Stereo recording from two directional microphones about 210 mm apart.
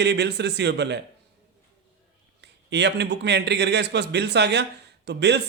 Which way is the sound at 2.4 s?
55° right (ahead or behind).